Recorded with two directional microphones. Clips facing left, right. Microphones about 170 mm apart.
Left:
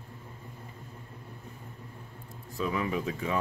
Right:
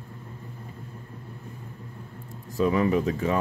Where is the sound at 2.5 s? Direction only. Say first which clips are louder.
Right 8 dB; 45° right (ahead or behind).